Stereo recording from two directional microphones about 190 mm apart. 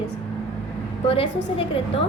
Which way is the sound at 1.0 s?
30° left (ahead or behind).